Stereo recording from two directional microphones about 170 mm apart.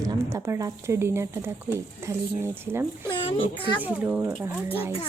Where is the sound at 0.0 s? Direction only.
20° right (ahead or behind).